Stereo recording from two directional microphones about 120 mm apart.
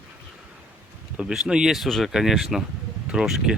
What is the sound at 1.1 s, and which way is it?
Speech, 5° right (ahead or behind).